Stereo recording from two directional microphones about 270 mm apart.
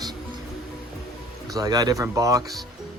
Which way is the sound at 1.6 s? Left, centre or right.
Centre.